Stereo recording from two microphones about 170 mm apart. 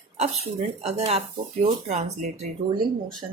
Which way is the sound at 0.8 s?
35° right (ahead or behind).